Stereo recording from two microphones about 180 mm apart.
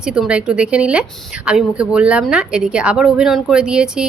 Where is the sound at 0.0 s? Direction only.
5° right (ahead or behind).